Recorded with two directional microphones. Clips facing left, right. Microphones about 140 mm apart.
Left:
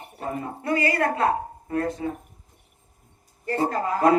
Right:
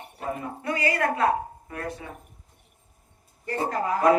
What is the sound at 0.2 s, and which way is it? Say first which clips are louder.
A man's voice: left 1 dB; 35° left (ahead or behind).